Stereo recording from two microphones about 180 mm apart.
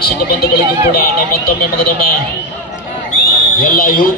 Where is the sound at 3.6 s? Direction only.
50° left (ahead or behind).